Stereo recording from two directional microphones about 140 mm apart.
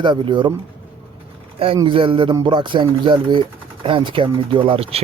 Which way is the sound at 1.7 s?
35° right (ahead or behind).